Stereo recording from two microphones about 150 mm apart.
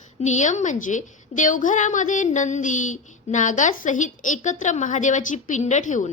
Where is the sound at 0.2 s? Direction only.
55° left (ahead or behind).